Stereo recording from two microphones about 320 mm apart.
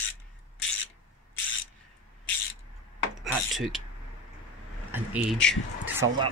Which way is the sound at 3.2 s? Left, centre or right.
Centre.